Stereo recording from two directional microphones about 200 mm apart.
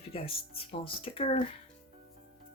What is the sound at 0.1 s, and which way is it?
Speech, 30° left (ahead or behind).